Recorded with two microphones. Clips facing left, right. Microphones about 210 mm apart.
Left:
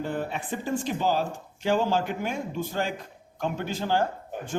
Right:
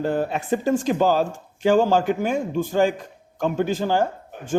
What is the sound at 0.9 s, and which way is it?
A man's voice, 50° right (ahead or behind).